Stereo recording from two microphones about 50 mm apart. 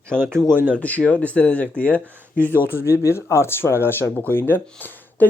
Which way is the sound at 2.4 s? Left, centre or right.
Right.